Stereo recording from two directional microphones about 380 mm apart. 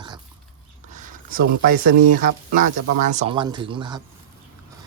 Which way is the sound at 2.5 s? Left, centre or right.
Centre.